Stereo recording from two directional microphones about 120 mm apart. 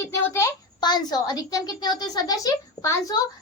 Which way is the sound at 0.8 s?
35° left (ahead or behind).